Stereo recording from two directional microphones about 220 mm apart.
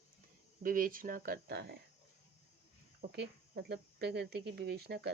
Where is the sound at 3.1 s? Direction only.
50° right (ahead or behind).